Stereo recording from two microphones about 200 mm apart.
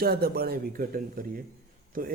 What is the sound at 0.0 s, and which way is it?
A man's voice, 50° right (ahead or behind).